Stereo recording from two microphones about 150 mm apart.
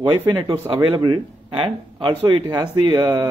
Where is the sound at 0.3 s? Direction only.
30° right (ahead or behind).